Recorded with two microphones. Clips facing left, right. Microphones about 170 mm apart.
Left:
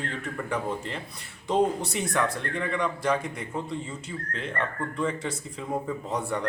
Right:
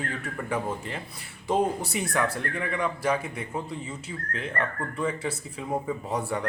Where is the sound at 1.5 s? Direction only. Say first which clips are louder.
Left 1 dB; 5° right (ahead or behind).